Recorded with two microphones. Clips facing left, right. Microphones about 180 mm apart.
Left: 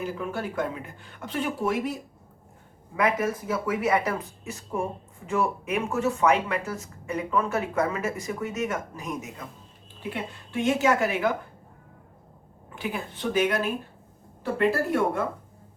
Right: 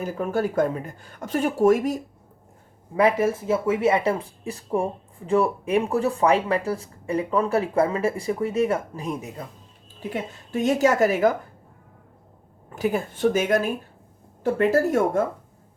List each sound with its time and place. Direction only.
0.0 s speech: 45° right (ahead or behind)
2.9 s speech: 30° right (ahead or behind)
10.0 s speech: 40° right (ahead or behind)
12.7 s speech: 45° right (ahead or behind)
14.6 s speech: 45° right (ahead or behind)